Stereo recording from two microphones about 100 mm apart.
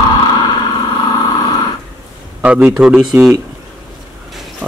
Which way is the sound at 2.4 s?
15° right (ahead or behind).